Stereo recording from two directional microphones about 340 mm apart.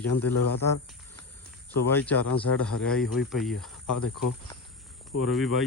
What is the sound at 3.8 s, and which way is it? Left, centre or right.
Speech, left.